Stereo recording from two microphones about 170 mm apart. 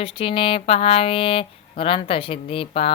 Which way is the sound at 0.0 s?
30° left (ahead or behind).